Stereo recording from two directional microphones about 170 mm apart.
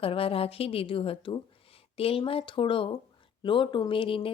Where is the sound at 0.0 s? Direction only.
35° left (ahead or behind).